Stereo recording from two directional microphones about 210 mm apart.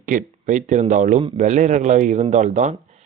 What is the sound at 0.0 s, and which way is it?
Speech, 40° right (ahead or behind).